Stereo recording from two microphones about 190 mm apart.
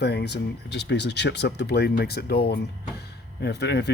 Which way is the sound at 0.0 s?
60° left (ahead or behind).